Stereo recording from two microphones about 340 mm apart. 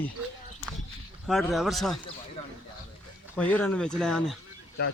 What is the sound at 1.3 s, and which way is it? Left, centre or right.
Speech, centre.